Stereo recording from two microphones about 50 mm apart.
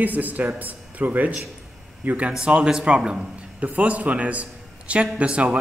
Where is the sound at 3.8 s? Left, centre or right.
Right.